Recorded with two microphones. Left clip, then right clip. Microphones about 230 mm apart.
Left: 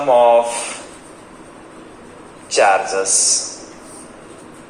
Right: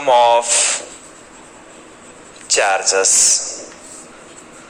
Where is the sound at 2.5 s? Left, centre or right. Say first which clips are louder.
Left 1 dB; right.